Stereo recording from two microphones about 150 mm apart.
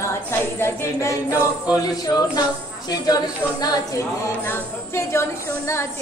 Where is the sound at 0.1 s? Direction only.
15° left (ahead or behind).